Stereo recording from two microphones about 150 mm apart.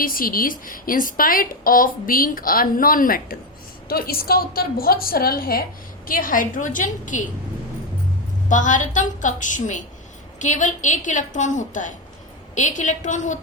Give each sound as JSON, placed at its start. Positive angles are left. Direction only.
{"t": 0.0, "sound": "a woman's voice", "side_deg": 70}
{"t": 3.8, "sound": "a woman's voice", "side_deg": 85}
{"t": 6.1, "sound": "a woman's voice", "side_deg": 65}
{"t": 8.4, "sound": "a woman's voice", "side_deg": 55}